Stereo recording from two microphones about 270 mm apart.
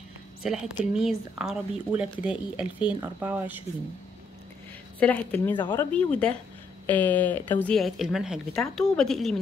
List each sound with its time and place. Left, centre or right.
0.4 s speech: centre
5.0 s speech: centre
5.9 s speech: centre